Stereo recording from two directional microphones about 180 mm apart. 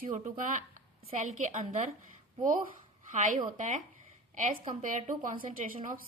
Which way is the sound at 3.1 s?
45° right (ahead or behind).